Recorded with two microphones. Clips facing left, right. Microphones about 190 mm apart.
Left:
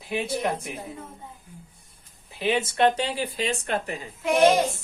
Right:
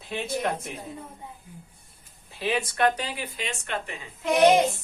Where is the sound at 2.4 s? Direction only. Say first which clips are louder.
Left 3 dB; 20° left (ahead or behind).